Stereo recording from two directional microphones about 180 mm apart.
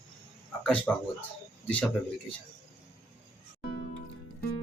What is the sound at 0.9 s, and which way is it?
Speech, 10° left (ahead or behind).